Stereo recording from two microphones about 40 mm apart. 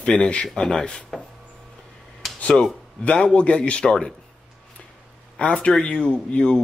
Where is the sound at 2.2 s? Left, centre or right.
Centre.